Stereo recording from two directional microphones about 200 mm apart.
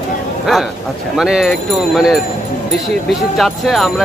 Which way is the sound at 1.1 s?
5° right (ahead or behind).